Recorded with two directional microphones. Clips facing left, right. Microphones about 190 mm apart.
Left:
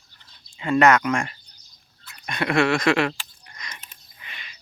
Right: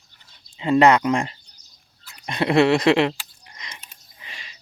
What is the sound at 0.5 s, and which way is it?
Speech, 25° right (ahead or behind).